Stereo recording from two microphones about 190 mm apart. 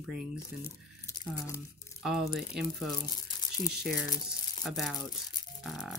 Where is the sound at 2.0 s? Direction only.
Centre (ahead or behind).